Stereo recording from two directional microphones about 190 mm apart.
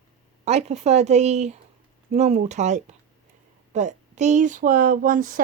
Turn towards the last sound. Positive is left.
turn(degrees=-45)  # may be behind; listen again after turning